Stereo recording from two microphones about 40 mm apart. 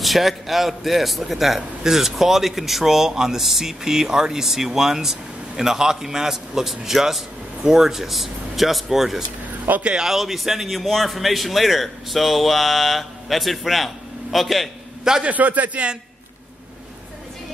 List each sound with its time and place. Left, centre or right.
0.0 s a man's voice: centre
9.7 s speech: right
10.0 s a man's voice: centre
15.2 s a man's voice: right